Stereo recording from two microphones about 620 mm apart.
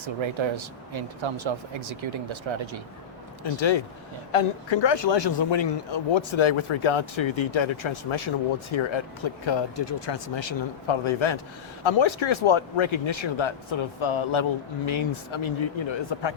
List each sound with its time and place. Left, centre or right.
0.0 s speech: right
3.4 s speech: left